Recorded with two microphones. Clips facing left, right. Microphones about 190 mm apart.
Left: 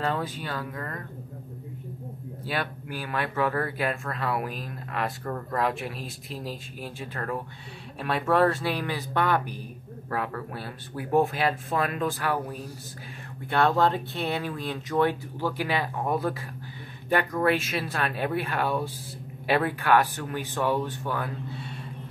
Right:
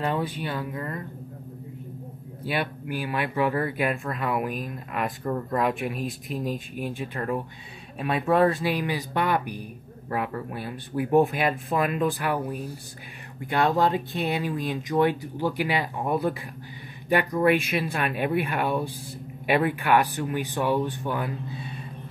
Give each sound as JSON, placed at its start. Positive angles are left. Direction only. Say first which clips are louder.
{"t": 0.0, "sound": "speech", "louder": "right 2 dB", "side_deg": -15}
{"t": 2.9, "sound": "speech", "louder": "right 3 dB", "side_deg": -15}